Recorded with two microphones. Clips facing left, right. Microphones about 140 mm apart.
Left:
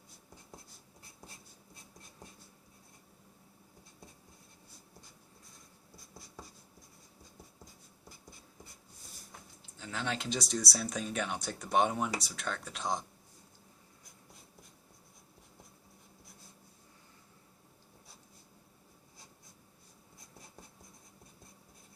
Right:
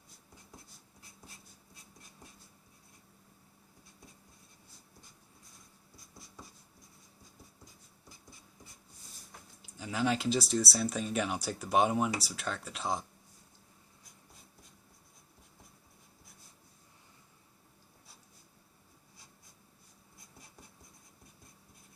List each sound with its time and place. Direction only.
9.7 s speech: 10° right (ahead or behind)